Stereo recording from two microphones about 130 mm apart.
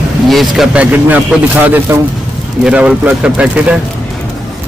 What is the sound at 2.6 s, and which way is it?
Speech, 10° right (ahead or behind).